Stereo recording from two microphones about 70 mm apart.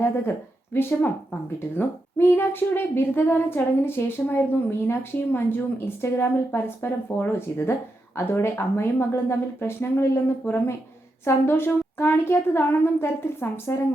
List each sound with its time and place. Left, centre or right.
0.0 s a woman's voice: left